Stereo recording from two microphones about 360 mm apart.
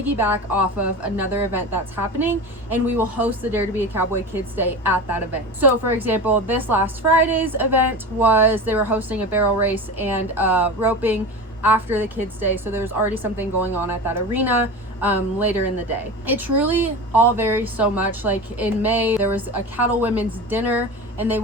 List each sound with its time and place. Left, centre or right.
0.0 s a woman's voice: centre